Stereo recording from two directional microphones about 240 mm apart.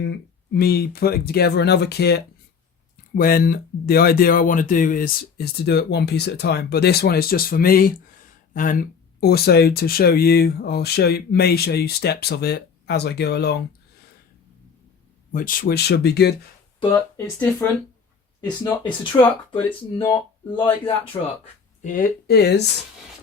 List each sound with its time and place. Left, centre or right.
0.0 s speech: left
15.3 s speech: left
17.2 s speech: centre; by 21.2 s left
21.8 s speech: left